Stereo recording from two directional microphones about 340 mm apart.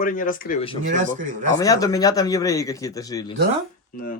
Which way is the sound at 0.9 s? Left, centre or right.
Right.